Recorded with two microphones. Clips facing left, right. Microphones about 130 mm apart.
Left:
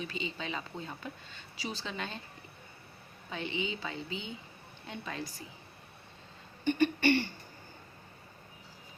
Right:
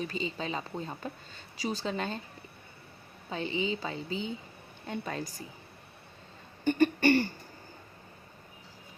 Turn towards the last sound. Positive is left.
turn(degrees=-45)  # may be behind; listen again after turning